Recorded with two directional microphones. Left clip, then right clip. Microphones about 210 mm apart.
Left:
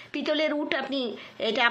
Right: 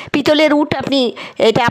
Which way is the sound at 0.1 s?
55° right (ahead or behind).